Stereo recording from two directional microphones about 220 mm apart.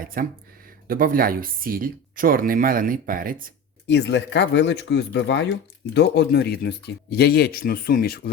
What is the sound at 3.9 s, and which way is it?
Speech, 55° left (ahead or behind).